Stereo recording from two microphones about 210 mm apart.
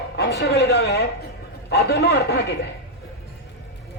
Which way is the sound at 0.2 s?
50° left (ahead or behind).